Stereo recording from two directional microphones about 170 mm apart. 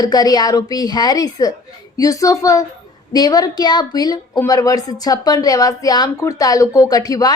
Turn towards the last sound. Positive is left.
turn(degrees=20)  # may be behind; listen again after turning